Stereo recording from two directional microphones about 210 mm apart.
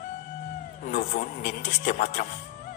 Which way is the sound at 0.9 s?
35° left (ahead or behind).